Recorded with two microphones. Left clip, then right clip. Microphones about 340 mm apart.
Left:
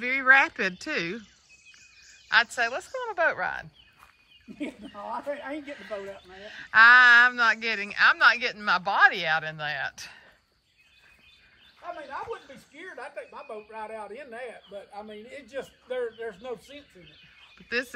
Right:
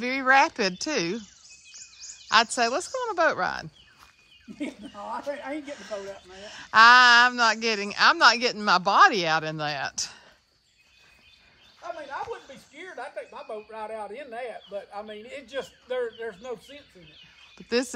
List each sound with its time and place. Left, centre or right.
0.0 s speech: centre
2.2 s speech: centre
4.6 s speech: right
6.3 s speech: centre
12.1 s a woman's voice: right; by 17.9 s centre